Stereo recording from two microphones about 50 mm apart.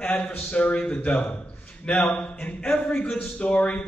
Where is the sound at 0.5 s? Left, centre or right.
Left.